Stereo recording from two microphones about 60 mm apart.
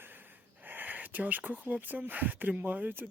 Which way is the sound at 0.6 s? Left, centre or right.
Right.